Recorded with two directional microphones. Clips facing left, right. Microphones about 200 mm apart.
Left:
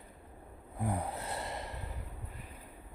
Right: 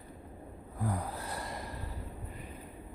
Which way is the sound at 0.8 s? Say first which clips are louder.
Even; 25° left (ahead or behind).